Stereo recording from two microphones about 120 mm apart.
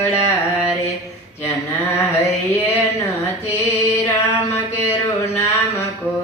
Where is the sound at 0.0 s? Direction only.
25° left (ahead or behind).